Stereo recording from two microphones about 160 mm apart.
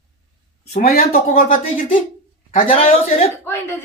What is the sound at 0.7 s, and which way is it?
Speech, 70° left (ahead or behind).